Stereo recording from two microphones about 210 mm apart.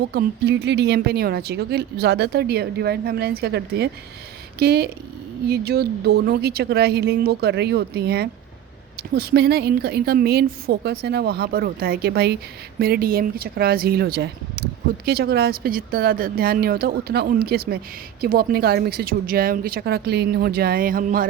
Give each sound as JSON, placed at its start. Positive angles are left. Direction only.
{"t": 0.1, "sound": "speech", "side_deg": -50}